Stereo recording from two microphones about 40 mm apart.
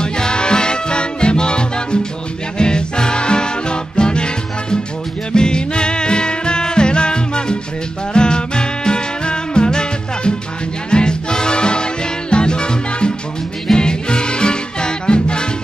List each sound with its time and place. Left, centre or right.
0.0 s music: left